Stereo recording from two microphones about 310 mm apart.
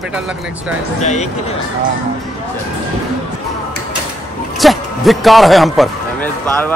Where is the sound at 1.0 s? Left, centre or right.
Left.